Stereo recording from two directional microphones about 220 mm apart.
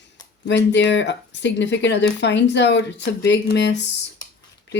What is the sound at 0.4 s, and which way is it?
Speech, 55° left (ahead or behind).